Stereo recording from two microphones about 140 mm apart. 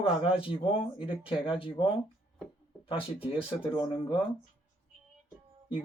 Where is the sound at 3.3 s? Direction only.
35° left (ahead or behind).